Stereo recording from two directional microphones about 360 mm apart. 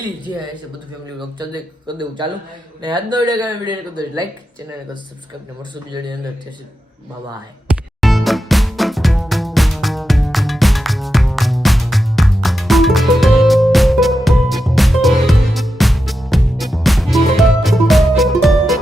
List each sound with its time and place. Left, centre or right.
2.0 s speech: centre
8.0 s music: centre